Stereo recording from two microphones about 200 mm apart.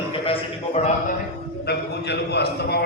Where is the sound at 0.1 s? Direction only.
30° left (ahead or behind).